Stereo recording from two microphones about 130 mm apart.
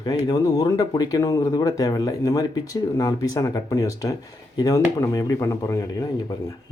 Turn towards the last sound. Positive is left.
turn(degrees=30)  # may be behind; listen again after turning